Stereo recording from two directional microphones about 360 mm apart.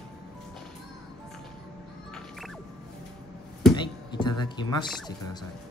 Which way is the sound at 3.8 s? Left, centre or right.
Centre.